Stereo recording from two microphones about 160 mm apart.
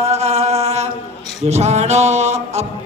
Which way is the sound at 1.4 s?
45° right (ahead or behind).